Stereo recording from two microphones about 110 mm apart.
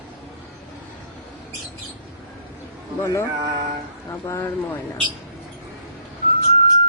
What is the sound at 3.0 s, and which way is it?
Speech, 25° left (ahead or behind).